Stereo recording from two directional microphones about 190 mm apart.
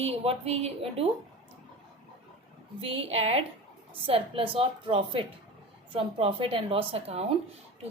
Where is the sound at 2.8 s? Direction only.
30° right (ahead or behind).